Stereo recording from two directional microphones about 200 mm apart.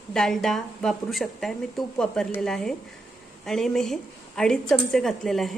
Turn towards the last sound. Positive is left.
turn(degrees=0)  # may be behind; listen again after turning